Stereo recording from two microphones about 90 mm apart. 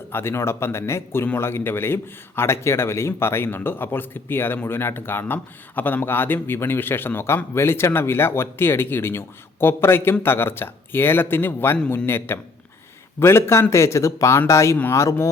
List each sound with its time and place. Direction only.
0.1 s a man's voice: 30° left (ahead or behind)